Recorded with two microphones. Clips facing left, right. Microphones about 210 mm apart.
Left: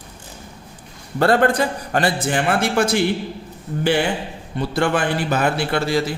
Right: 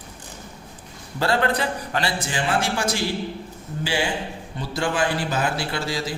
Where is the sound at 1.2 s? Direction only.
55° left (ahead or behind).